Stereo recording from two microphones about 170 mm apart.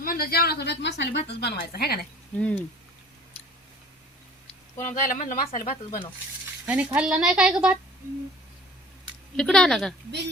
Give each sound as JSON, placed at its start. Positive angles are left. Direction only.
{"t": 0.0, "sound": "a woman's voice", "side_deg": 60}
{"t": 2.4, "sound": "speech", "side_deg": 5}
{"t": 4.8, "sound": "speech", "side_deg": 45}
{"t": 6.7, "sound": "a woman's voice", "side_deg": -10}
{"t": 9.3, "sound": "a woman's voice", "side_deg": 5}